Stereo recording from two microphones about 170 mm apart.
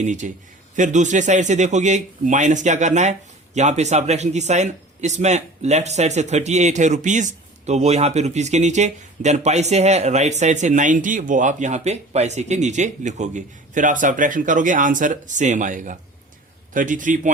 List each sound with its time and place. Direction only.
0.0 s a man's voice: 45° right (ahead or behind)